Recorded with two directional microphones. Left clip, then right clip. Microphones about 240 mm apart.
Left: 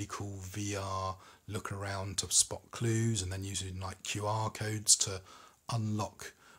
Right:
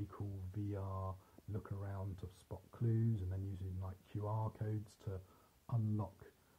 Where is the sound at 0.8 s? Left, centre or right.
Left.